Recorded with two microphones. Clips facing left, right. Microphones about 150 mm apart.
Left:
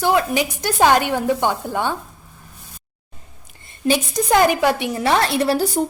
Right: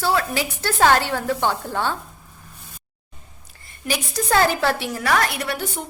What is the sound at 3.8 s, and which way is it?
A woman's voice, 20° left (ahead or behind).